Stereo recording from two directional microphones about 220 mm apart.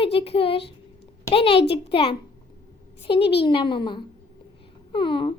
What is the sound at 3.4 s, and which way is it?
Speech, 20° left (ahead or behind).